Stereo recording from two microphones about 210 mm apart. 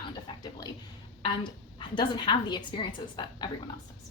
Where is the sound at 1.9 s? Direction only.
20° left (ahead or behind).